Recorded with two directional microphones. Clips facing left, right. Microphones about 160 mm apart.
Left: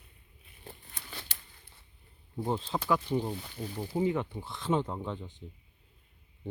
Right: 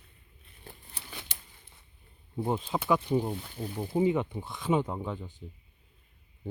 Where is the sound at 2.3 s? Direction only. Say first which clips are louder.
Right 2 dB; 15° right (ahead or behind).